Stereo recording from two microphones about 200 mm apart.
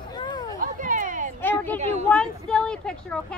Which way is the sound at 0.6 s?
40° right (ahead or behind).